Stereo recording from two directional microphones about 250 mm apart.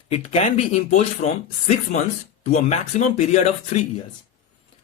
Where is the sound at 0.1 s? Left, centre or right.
Left.